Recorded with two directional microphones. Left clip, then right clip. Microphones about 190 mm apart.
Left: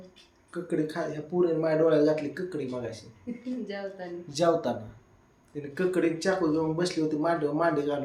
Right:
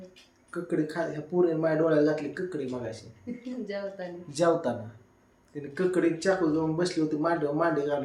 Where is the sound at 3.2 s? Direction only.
5° right (ahead or behind).